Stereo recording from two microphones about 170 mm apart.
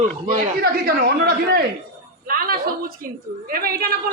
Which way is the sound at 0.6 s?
60° right (ahead or behind).